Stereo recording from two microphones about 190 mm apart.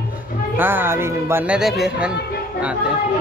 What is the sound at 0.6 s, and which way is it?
Speech, 10° right (ahead or behind).